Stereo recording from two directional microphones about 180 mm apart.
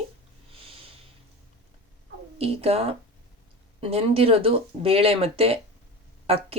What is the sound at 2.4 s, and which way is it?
Speech, 35° right (ahead or behind).